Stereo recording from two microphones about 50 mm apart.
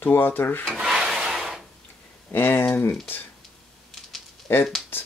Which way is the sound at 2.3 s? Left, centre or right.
Left.